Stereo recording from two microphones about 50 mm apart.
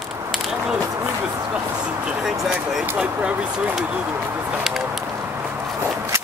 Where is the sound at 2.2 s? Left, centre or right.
Centre.